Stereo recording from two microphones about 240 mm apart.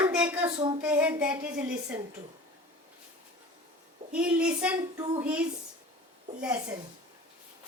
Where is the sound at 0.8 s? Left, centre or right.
Centre.